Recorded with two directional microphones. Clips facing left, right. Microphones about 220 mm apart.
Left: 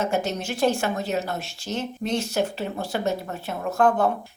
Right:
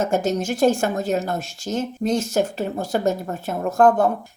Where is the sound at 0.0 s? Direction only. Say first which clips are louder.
Right 4 dB; 45° right (ahead or behind).